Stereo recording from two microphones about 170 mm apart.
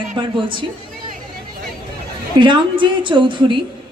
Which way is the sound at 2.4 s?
30° right (ahead or behind).